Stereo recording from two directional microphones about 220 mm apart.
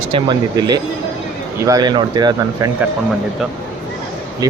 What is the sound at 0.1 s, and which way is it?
Speech, 20° right (ahead or behind).